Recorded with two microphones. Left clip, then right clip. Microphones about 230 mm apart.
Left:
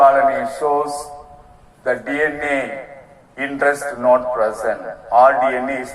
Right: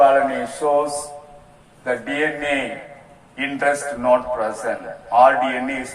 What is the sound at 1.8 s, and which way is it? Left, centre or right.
A man's voice, left.